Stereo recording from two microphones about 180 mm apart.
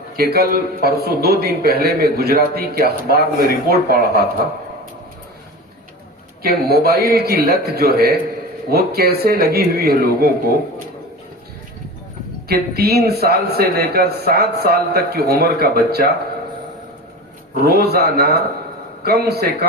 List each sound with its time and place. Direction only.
0.2 s a man's voice: 60° right (ahead or behind)
6.4 s a man's voice: 60° right (ahead or behind)
12.5 s a man's voice: 60° right (ahead or behind)
17.5 s a man's voice: 60° right (ahead or behind)